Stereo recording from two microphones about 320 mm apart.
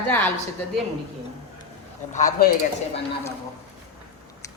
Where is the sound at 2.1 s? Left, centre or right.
Left.